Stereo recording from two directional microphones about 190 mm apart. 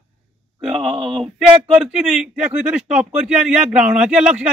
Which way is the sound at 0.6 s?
Centre (ahead or behind).